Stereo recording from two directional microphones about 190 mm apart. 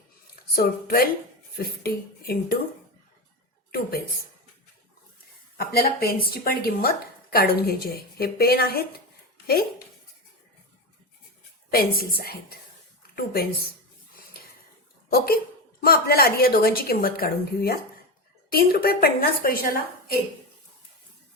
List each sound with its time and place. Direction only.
0.5 s speech: 55° left (ahead or behind)
5.5 s speech: 55° left (ahead or behind)
11.7 s speech: 50° left (ahead or behind)
15.8 s speech: 50° left (ahead or behind)